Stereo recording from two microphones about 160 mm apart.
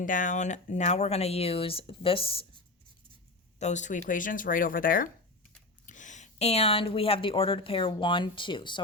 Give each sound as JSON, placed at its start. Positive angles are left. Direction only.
{"t": 0.0, "sound": "speech", "side_deg": 55}
{"t": 3.6, "sound": "speech", "side_deg": 45}